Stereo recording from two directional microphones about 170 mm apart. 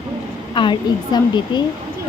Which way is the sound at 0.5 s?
25° left (ahead or behind).